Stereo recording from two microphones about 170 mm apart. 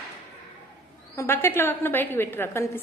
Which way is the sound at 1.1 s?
15° left (ahead or behind).